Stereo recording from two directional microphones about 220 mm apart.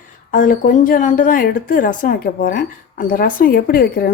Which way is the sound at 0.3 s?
35° left (ahead or behind).